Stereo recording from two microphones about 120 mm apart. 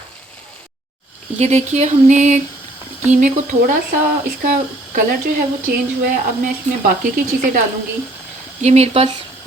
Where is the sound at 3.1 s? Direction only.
90° right.